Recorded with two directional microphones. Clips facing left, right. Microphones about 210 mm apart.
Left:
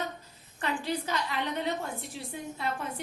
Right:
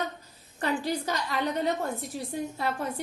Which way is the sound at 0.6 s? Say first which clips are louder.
Right 3 dB; 40° right (ahead or behind).